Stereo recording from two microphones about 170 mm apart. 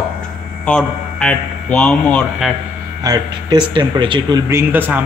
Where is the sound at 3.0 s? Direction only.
25° right (ahead or behind).